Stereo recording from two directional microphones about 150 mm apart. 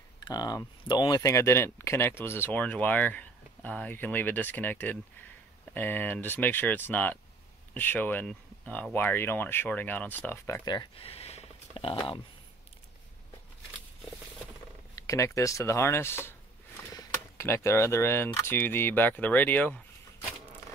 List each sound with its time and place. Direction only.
0.2 s speech: 25° left (ahead or behind)
15.0 s speech: 20° left (ahead or behind)